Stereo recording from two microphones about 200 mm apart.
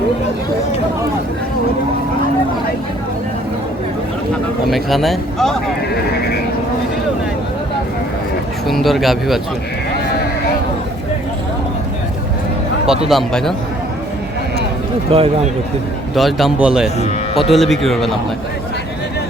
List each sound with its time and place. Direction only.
4.7 s speech: centre (ahead or behind)
8.6 s speech: centre (ahead or behind)
12.8 s speech: 5° right (ahead or behind)
15.1 s a man's voice: 30° right (ahead or behind)
16.1 s speech: centre (ahead or behind)